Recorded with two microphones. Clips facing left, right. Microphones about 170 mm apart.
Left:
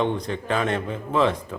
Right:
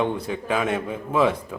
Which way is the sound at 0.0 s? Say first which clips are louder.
Even; 5° right (ahead or behind).